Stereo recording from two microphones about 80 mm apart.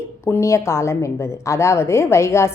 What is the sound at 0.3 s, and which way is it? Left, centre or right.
A woman's voice, left.